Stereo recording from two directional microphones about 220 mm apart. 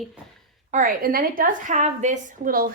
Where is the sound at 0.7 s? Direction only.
40° right (ahead or behind).